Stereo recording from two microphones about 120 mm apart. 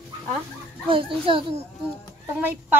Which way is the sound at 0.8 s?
45° right (ahead or behind).